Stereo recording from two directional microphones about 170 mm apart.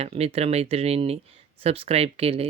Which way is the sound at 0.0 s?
35° right (ahead or behind).